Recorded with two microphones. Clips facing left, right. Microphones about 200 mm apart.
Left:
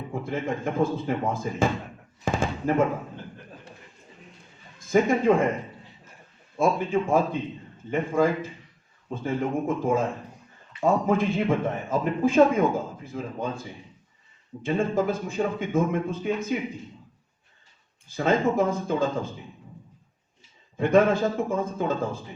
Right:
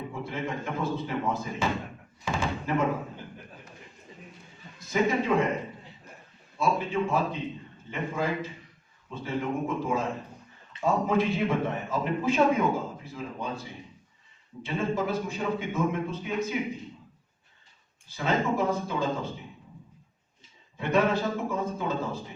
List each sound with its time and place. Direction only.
0.1 s a man's voice: 50° left (ahead or behind)
2.2 s a sound: 50° left (ahead or behind)
4.8 s a man's voice: 50° left (ahead or behind)
6.6 s a man's voice: 50° left (ahead or behind)
14.6 s a man's voice: 50° left (ahead or behind)
18.1 s a man's voice: 50° left (ahead or behind)
20.7 s a man's voice: 50° left (ahead or behind)